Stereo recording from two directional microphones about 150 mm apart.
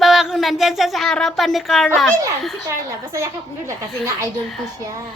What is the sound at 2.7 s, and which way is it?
Speech, 20° right (ahead or behind).